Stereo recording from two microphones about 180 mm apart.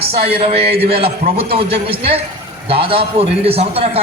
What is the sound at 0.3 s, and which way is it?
A man's voice, 30° right (ahead or behind).